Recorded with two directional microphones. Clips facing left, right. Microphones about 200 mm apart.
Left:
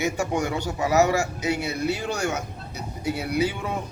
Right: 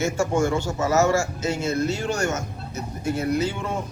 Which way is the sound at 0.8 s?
15° left (ahead or behind).